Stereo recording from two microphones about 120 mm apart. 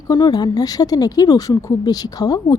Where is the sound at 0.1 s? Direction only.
35° left (ahead or behind).